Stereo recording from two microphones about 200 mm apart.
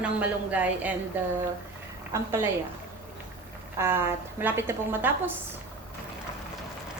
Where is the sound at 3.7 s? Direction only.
10° right (ahead or behind).